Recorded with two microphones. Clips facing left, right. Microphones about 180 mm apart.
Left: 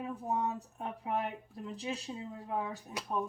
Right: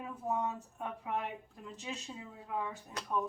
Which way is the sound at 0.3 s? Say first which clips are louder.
Even; 35° left (ahead or behind).